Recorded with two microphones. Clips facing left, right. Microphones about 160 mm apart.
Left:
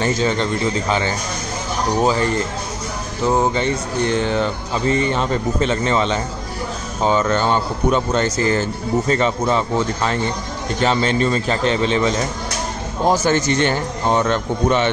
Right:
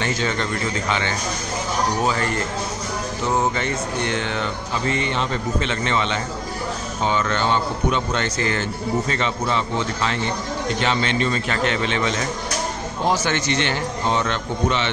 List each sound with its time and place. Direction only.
0.0 s speech: 35° left (ahead or behind)
3.5 s a man's voice: 30° left (ahead or behind)